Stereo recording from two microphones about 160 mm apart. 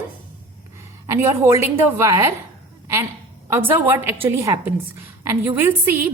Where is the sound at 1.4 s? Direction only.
15° right (ahead or behind).